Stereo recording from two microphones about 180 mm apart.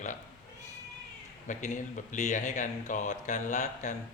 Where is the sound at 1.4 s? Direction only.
45° left (ahead or behind).